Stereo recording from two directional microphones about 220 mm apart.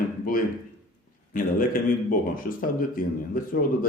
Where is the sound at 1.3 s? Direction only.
40° left (ahead or behind).